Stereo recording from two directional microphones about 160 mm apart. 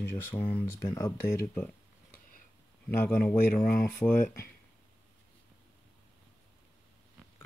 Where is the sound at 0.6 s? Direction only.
20° left (ahead or behind).